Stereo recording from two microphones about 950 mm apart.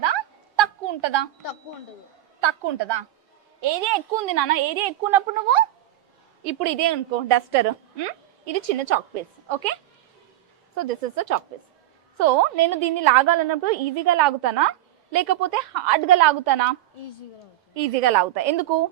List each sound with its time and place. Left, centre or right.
0.0 s a sound: right
2.4 s a woman's voice: right
10.8 s a woman's voice: right
17.7 s a woman's voice: right